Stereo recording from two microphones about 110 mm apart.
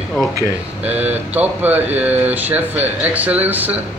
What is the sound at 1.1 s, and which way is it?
Speech, 15° right (ahead or behind).